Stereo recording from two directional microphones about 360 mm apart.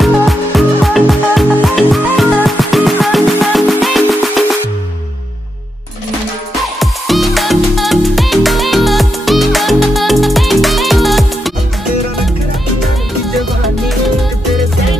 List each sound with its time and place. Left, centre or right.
0.0 s music: centre
6.8 s music: centre